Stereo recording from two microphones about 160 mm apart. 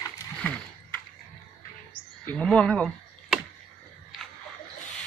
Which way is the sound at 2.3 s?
5° left (ahead or behind).